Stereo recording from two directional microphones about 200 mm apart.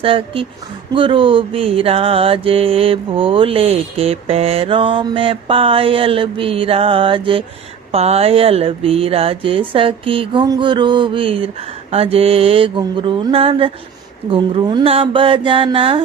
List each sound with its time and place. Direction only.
0.0 s mantra: 25° right (ahead or behind)